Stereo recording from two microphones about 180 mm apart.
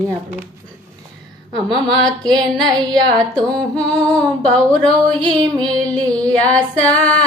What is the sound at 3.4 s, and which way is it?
Speech, 5° left (ahead or behind).